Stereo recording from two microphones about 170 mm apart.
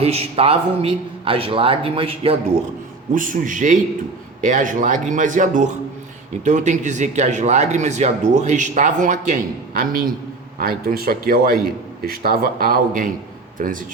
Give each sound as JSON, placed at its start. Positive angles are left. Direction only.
{"t": 0.0, "sound": "a man's voice", "side_deg": -35}
{"t": 3.2, "sound": "a man's voice", "side_deg": -50}